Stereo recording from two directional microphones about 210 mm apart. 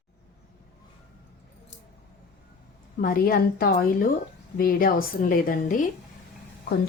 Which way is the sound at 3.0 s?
45° left (ahead or behind).